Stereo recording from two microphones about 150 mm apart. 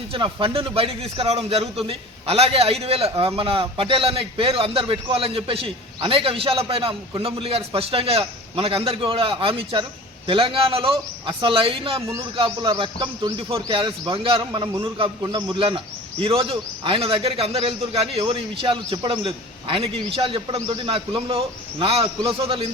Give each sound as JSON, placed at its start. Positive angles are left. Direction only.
{"t": 0.1, "sound": "a man's voice", "side_deg": -35}